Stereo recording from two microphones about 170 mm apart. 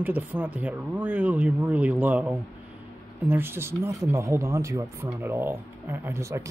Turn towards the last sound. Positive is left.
turn(degrees=-15)  # may be behind; listen again after turning